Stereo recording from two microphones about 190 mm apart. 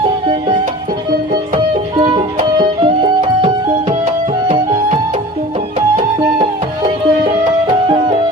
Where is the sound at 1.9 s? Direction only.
25° right (ahead or behind).